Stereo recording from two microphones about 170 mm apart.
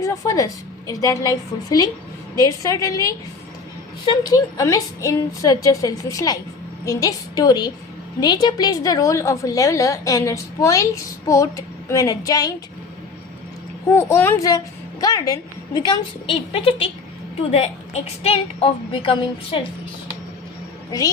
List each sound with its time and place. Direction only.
0.0 s a woman's voice: 20° left (ahead or behind)
13.9 s a woman's voice: 15° left (ahead or behind); by 19.6 s 30° left (ahead or behind)